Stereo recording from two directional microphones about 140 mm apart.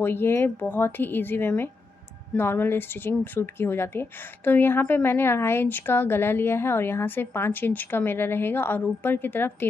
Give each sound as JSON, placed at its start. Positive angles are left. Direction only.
{"t": 0.0, "sound": "speech", "side_deg": 15}